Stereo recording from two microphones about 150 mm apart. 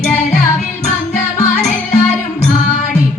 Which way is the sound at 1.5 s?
50° left (ahead or behind).